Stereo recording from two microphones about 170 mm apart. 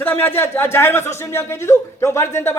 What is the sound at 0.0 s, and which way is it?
A man's voice, 10° left (ahead or behind).